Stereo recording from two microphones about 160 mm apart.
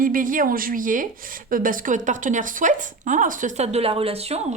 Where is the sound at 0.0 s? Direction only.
60° right (ahead or behind).